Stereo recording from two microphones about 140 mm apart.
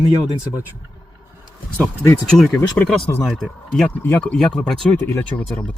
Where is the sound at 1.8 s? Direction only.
20° left (ahead or behind).